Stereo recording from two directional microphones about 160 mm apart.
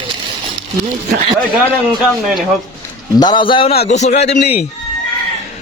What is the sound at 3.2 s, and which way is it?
A man's voice, 30° left (ahead or behind).